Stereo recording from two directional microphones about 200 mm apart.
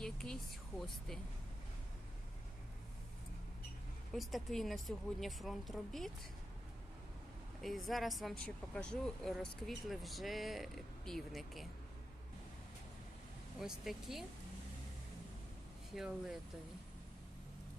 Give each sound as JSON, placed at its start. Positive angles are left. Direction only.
{"t": 0.0, "sound": "speech", "side_deg": 5}
{"t": 4.1, "sound": "speech", "side_deg": 0}
{"t": 7.6, "sound": "speech", "side_deg": 0}
{"t": 13.6, "sound": "speech", "side_deg": 0}
{"t": 16.0, "sound": "speech", "side_deg": -5}